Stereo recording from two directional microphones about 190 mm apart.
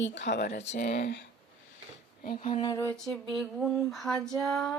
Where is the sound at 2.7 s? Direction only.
20° left (ahead or behind).